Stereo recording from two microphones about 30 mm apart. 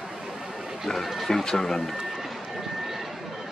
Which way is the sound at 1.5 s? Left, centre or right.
Centre.